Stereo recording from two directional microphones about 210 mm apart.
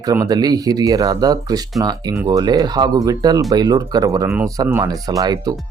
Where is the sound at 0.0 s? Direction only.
15° right (ahead or behind).